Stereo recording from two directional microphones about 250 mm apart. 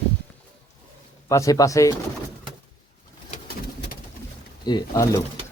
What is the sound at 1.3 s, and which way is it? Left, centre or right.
Speech, centre.